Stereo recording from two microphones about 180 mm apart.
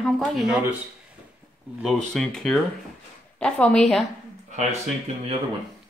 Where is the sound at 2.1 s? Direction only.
Centre (ahead or behind).